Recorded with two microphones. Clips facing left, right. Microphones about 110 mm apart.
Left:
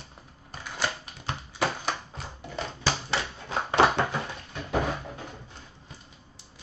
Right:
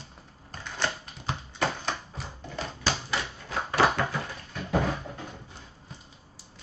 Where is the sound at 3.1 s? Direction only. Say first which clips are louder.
Left 2 dB; 25° left (ahead or behind).